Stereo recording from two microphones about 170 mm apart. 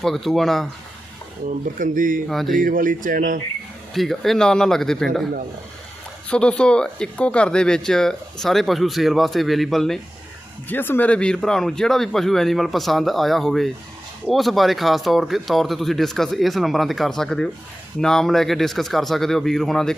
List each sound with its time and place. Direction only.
0.0 s speech: centre (ahead or behind)
1.5 s speech: 50° right (ahead or behind)
3.9 s speech: centre (ahead or behind)
6.3 s speech: 5° left (ahead or behind)
10.7 s speech: 10° left (ahead or behind)